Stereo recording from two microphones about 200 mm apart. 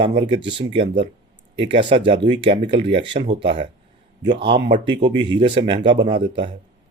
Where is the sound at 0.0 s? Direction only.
25° right (ahead or behind).